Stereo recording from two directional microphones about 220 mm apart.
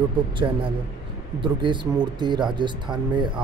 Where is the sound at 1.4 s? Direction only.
20° right (ahead or behind).